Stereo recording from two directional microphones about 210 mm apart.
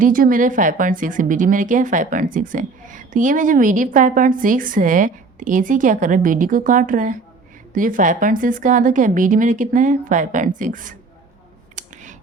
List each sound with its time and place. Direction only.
0.0 s speech: 40° right (ahead or behind)